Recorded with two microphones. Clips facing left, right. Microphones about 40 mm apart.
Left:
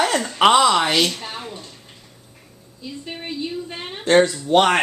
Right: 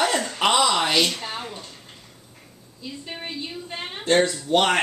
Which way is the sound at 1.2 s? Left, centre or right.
Centre.